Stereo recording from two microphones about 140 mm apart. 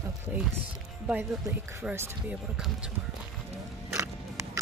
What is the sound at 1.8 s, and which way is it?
Speech, 20° right (ahead or behind).